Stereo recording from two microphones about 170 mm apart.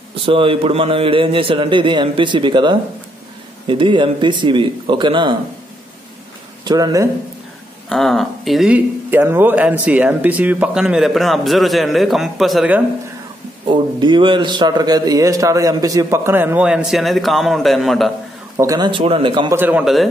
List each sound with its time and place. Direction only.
0.1 s a man's voice: 30° right (ahead or behind)
6.6 s speech: 25° right (ahead or behind)
7.9 s speech: centre (ahead or behind)
13.7 s a man's voice: 25° right (ahead or behind); by 18.1 s centre (ahead or behind)
18.6 s a man's voice: 25° right (ahead or behind)
19.5 s speech: 10° right (ahead or behind)